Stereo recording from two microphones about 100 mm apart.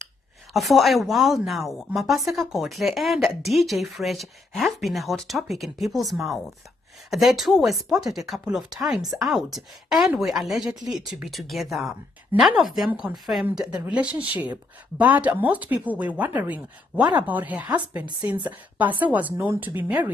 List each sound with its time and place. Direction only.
0.5 s a woman's voice: centre (ahead or behind); by 19.7 s 20° right (ahead or behind)